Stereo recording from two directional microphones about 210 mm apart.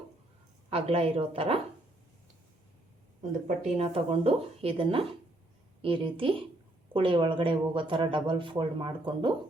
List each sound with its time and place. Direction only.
0.7 s speech: 30° right (ahead or behind)
3.4 s speech: 30° right (ahead or behind)